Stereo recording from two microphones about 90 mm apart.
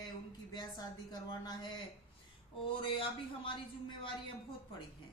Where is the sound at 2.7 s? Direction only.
70° left (ahead or behind).